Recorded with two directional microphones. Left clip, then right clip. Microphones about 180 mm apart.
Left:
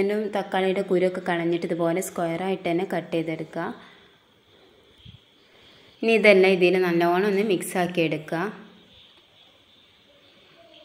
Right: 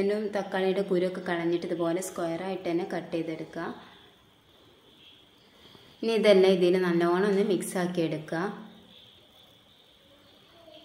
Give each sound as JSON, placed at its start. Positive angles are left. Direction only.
{"t": 0.0, "sound": "a woman's voice", "side_deg": 25}
{"t": 6.1, "sound": "a woman's voice", "side_deg": 15}